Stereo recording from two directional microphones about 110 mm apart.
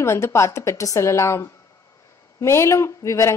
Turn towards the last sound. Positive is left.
turn(degrees=25)  # may be behind; listen again after turning